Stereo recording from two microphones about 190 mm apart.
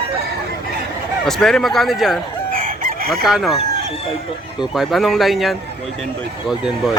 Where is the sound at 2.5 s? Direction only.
45° right (ahead or behind).